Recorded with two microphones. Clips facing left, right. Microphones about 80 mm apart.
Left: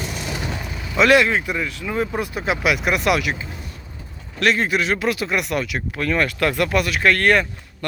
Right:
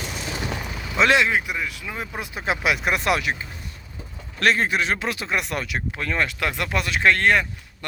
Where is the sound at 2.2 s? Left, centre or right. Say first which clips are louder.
Left 4 dB; right.